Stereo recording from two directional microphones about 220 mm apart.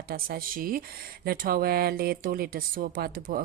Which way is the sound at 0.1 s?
40° right (ahead or behind).